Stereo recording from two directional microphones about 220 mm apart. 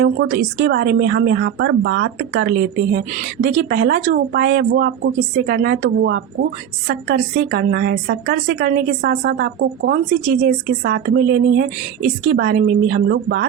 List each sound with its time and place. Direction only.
0.0 s a woman's voice: 50° right (ahead or behind)